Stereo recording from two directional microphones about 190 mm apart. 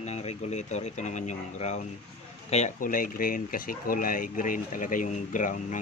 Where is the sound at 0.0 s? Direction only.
35° left (ahead or behind).